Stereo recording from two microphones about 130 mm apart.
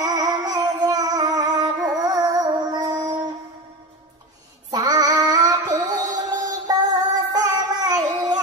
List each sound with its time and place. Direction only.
0.0 s music: 30° right (ahead or behind)
4.6 s child singing: 30° right (ahead or behind)
6.7 s music: 30° right (ahead or behind)